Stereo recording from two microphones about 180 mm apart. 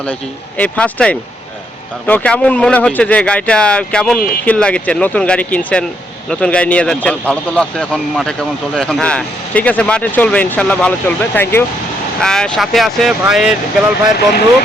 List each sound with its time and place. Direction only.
0.0 s speech: 10° left (ahead or behind)